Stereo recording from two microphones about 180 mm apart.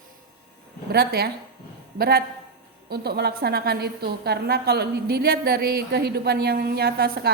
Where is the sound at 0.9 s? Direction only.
60° right (ahead or behind).